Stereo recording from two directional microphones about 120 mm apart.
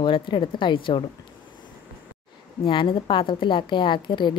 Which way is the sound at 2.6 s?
45° left (ahead or behind).